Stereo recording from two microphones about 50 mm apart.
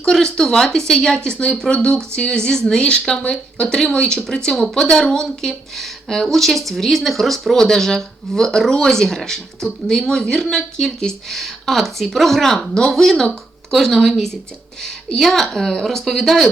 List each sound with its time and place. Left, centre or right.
0.0 s speech: centre